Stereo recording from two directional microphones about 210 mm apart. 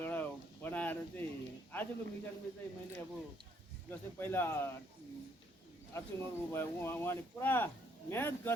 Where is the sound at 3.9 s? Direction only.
10° left (ahead or behind).